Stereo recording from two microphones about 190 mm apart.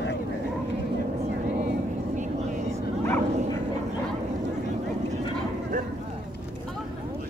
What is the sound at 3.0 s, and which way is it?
Bow-wow, 15° left (ahead or behind).